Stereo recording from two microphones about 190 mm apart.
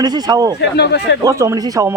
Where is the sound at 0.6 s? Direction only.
65° left (ahead or behind).